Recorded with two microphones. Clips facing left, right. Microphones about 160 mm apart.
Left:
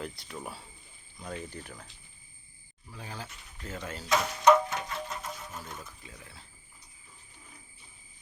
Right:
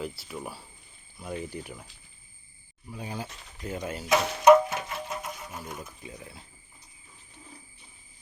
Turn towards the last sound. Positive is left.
turn(degrees=-20)  # may be behind; listen again after turning